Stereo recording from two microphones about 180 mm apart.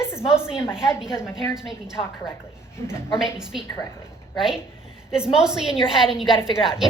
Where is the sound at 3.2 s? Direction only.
5° right (ahead or behind).